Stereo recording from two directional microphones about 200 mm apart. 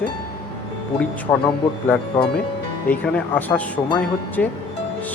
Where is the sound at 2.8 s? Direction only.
10° left (ahead or behind).